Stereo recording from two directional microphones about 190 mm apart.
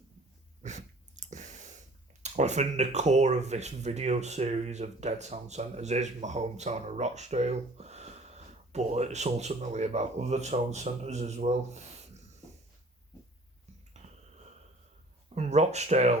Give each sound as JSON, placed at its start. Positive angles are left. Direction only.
{"t": 0.6, "sound": "breathing", "side_deg": -40}
{"t": 2.2, "sound": "speech", "side_deg": -35}
{"t": 13.9, "sound": "a sound", "side_deg": -35}
{"t": 15.4, "sound": "speech", "side_deg": -35}